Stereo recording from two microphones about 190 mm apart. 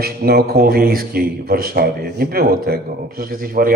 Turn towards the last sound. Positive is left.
turn(degrees=-50)  # may be behind; listen again after turning